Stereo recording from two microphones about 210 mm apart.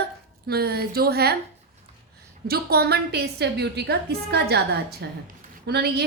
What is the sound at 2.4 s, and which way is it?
A woman's voice, 45° right (ahead or behind).